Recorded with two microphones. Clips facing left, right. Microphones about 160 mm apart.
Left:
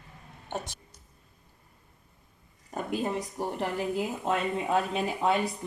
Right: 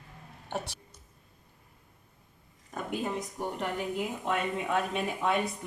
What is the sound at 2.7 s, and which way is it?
A woman's voice, 35° left (ahead or behind).